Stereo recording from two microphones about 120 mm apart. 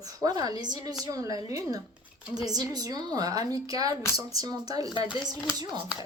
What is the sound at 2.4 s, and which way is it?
A woman's voice, 30° right (ahead or behind).